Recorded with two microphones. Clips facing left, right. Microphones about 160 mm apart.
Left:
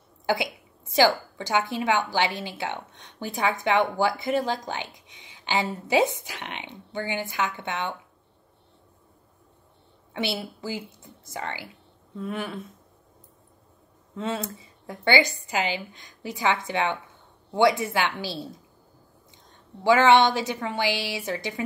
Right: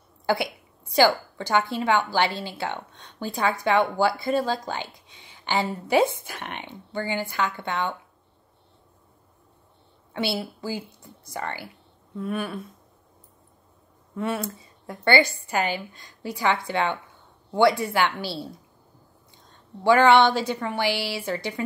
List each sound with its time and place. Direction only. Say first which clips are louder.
0.3 s a woman's voice: right 1 dB; 20° left (ahead or behind)
10.6 s a woman's voice: right 1 dB; 20° left (ahead or behind)
14.1 s a woman's voice: right 2 dB; 20° left (ahead or behind)
20.0 s a woman's voice: right 1 dB; 20° left (ahead or behind)